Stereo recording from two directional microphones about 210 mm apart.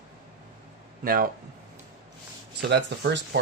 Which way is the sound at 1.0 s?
40° right (ahead or behind).